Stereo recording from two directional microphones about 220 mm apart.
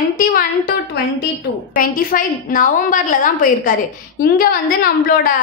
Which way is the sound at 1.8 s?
40° left (ahead or behind).